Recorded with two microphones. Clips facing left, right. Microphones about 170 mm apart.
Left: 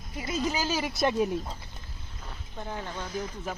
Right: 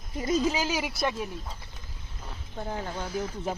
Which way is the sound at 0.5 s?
15° right (ahead or behind).